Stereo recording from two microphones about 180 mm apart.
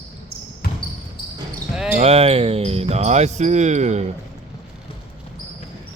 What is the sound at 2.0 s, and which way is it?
Speech, 35° right (ahead or behind).